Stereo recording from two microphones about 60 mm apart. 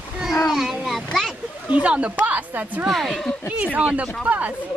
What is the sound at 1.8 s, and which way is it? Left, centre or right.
Speech, right.